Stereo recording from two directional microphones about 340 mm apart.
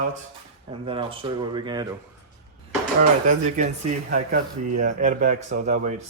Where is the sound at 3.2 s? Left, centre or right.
Right.